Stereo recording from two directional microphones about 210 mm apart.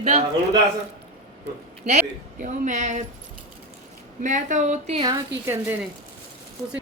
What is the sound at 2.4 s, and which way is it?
Speech, 35° right (ahead or behind).